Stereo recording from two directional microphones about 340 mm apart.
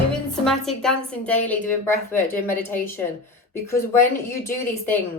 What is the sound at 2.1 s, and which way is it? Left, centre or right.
Speech, left.